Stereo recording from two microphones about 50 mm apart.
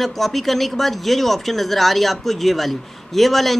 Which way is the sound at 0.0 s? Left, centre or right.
Centre.